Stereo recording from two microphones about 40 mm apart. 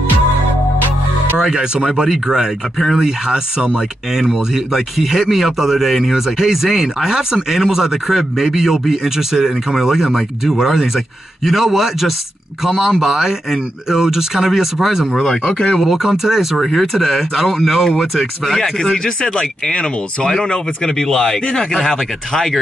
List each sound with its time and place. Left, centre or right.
1.4 s speech: centre
4.2 s speech: centre
15.2 s speech: centre
15.8 s speech: centre
19.0 s speech: centre